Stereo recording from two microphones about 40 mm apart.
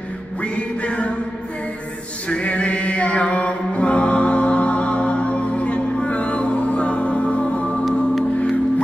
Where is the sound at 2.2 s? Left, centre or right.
Left.